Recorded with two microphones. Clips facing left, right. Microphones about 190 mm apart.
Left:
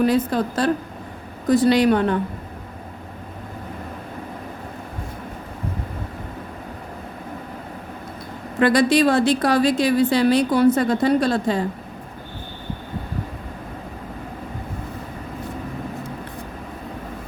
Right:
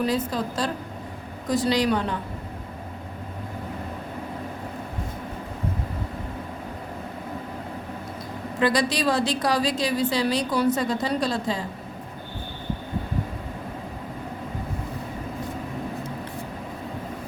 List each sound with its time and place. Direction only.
0.0 s a woman's voice: 60° left (ahead or behind)
8.5 s a woman's voice: 60° left (ahead or behind)